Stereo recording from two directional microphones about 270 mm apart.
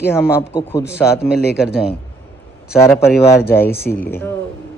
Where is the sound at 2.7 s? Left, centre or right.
Centre.